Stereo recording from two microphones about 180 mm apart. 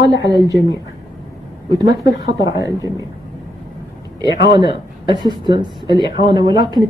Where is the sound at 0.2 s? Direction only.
20° right (ahead or behind).